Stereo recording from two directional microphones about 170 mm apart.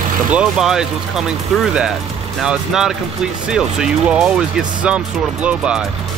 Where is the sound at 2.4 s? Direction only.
5° right (ahead or behind).